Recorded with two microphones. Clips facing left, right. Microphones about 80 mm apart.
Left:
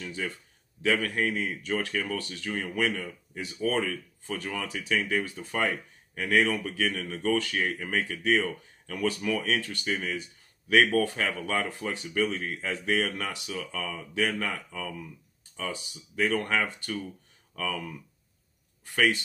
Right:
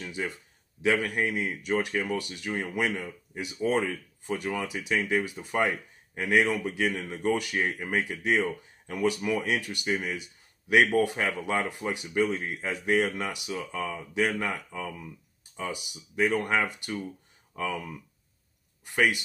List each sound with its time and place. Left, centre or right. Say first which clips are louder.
0.0 s a man's voice: right 1 dB; centre